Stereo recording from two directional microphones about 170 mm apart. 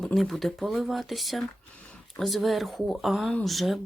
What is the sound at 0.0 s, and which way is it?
Speech, centre (ahead or behind).